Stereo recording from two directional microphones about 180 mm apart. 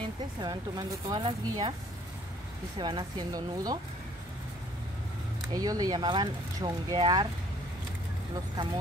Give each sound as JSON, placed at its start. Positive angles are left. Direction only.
{"t": 0.4, "sound": "speech", "side_deg": -20}
{"t": 2.8, "sound": "speech", "side_deg": -25}
{"t": 5.5, "sound": "speech", "side_deg": -20}